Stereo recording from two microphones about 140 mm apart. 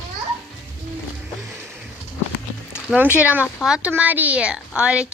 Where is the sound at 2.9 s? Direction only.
10° right (ahead or behind).